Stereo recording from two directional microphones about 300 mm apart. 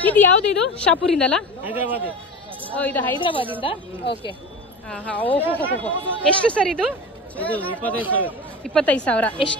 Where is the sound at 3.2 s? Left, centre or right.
Centre.